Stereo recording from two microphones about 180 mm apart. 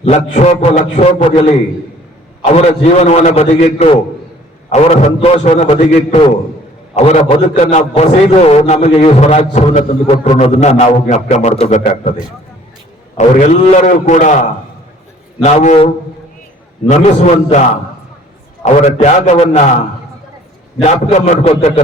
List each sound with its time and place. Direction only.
0.0 s a man's voice: 40° left (ahead or behind)
2.4 s a man's voice: 40° left (ahead or behind)
13.1 s a man's voice: 40° left (ahead or behind)
15.4 s a man's voice: 40° left (ahead or behind)
18.6 s a man's voice: 40° left (ahead or behind)
20.8 s a man's voice: 40° left (ahead or behind)